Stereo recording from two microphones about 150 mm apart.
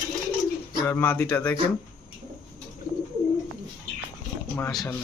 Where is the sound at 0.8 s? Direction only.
15° left (ahead or behind).